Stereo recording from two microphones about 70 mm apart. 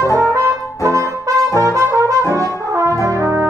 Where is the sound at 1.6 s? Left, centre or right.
Right.